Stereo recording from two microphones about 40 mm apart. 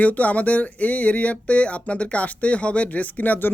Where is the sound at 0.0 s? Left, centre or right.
Left.